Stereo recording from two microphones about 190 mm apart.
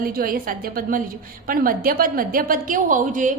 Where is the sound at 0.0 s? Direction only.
50° right (ahead or behind).